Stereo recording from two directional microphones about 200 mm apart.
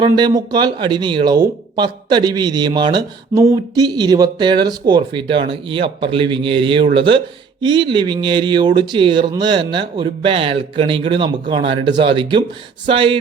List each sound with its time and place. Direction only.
0.3 s speech: 20° right (ahead or behind)